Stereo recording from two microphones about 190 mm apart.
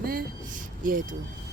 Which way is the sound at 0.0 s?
50° right (ahead or behind).